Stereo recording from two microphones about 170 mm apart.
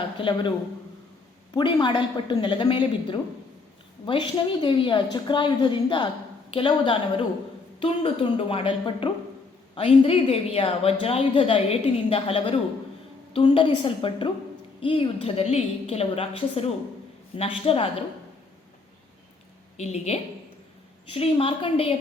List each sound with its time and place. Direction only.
0.2 s speech: 30° left (ahead or behind)
1.5 s a woman's voice: 30° left (ahead or behind)
19.7 s a woman's voice: 40° left (ahead or behind)